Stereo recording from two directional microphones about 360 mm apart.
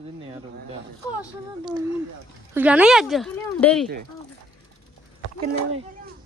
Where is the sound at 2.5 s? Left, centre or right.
Centre.